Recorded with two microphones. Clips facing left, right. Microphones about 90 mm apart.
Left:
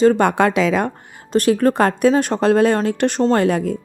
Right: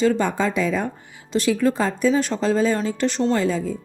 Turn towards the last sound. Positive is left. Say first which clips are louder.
# left 5 dB
turn(degrees=65)  # may be behind; listen again after turning